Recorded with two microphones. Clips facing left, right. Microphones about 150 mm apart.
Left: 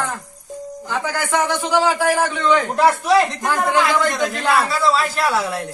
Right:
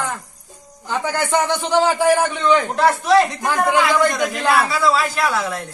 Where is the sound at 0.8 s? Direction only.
20° right (ahead or behind).